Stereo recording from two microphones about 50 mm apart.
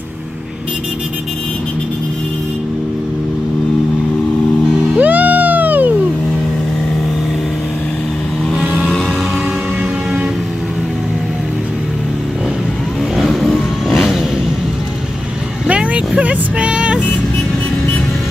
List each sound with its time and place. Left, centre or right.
4.9 s cat: right
8.5 s vehicle: centre
13.2 s vehicle: centre
15.6 s vehicle: right